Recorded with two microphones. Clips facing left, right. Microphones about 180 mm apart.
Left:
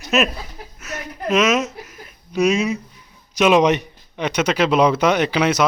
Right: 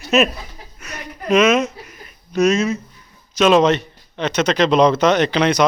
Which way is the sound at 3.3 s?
10° left (ahead or behind).